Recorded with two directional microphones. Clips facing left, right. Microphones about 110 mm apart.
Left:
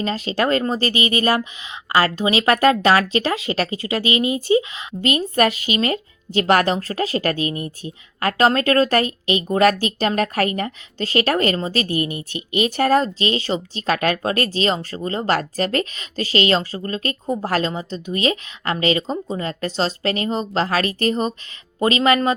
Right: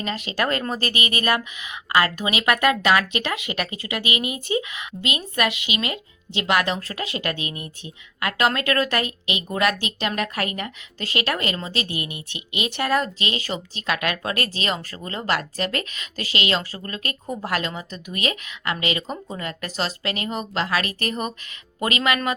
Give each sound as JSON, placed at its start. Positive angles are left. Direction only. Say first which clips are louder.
{"t": 0.0, "sound": "speech", "louder": "left 4 dB", "side_deg": 30}
{"t": 4.9, "sound": "speech", "louder": "left 7 dB", "side_deg": 45}